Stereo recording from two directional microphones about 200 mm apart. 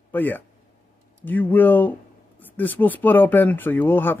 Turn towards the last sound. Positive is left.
turn(degrees=10)  # may be behind; listen again after turning